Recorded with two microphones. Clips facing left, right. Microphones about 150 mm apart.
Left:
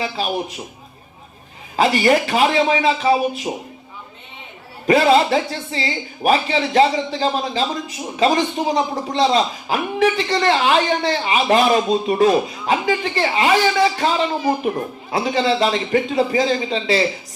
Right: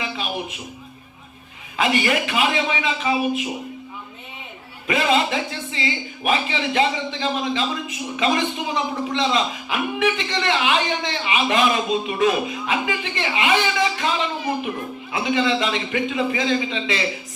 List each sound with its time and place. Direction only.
0.0 s speech: 35° left (ahead or behind)
1.7 s speech: 35° left (ahead or behind)
4.9 s speech: 35° left (ahead or behind)